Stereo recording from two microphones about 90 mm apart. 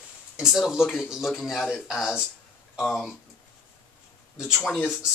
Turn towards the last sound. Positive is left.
turn(degrees=0)  # may be behind; listen again after turning